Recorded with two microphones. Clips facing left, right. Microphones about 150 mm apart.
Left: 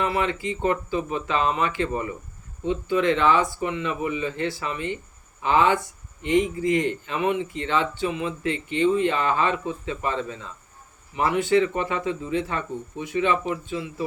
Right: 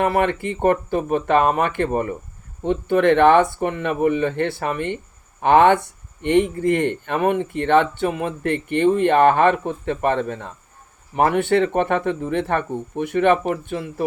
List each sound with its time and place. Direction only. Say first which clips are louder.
0.0 s speech: right 5 dB; 55° right (ahead or behind)